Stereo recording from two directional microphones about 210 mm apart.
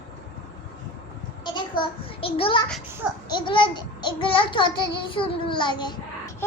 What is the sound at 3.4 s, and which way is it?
A child's voice, 25° left (ahead or behind).